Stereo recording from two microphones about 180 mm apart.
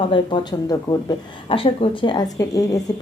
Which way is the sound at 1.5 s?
30° left (ahead or behind).